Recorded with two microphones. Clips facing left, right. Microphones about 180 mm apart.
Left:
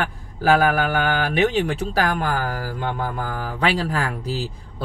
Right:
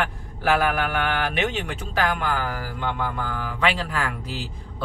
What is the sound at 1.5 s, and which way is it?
Speech, 35° left (ahead or behind).